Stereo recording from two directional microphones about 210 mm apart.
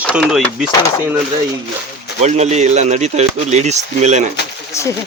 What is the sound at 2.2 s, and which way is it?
Speech, 30° right (ahead or behind).